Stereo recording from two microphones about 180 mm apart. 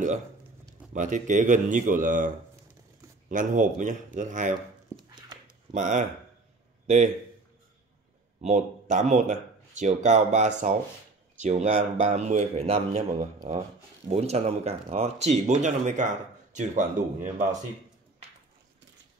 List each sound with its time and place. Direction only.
0.9 s speech: 45° right (ahead or behind)
4.9 s dog: 15° right (ahead or behind)
5.7 s speech: 45° right (ahead or behind)
8.4 s speech: 40° right (ahead or behind)